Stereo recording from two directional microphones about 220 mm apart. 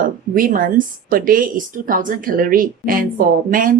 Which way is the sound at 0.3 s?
40° right (ahead or behind).